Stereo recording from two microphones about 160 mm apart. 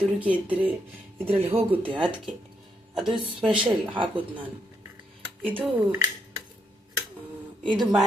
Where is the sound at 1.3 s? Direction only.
35° right (ahead or behind).